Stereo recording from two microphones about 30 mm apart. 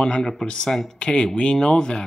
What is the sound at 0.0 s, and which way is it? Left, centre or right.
Speech, left.